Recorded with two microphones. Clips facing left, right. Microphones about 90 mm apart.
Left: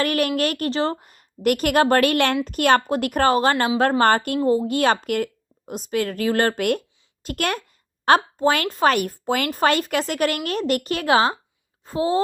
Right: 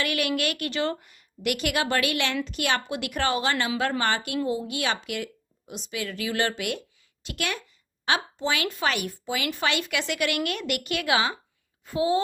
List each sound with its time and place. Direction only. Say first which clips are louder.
0.0 s a woman's voice: left 6 dB; 40° left (ahead or behind)